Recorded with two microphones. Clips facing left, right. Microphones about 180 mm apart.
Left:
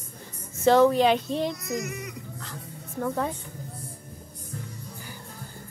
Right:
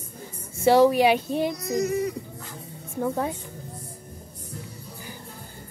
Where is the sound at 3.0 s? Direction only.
10° right (ahead or behind).